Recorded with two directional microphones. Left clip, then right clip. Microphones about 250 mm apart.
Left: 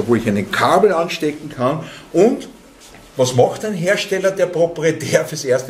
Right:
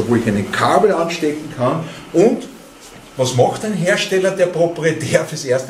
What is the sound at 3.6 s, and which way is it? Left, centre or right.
Speech, left.